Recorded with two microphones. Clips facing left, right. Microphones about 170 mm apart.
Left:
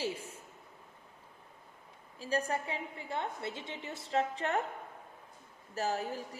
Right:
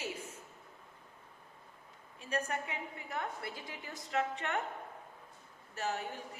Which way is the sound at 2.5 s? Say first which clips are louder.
Left 3 dB; 30° left (ahead or behind).